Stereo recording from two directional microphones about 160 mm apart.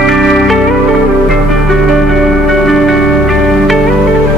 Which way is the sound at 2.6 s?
Centre (ahead or behind).